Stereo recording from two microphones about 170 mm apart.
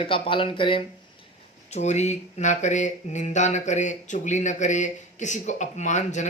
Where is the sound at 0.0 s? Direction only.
30° left (ahead or behind).